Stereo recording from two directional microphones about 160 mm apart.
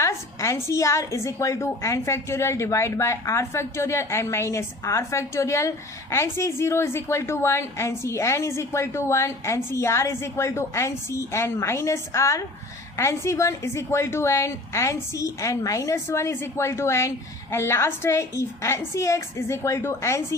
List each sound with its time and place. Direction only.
0.0 s a woman's voice: 20° left (ahead or behind)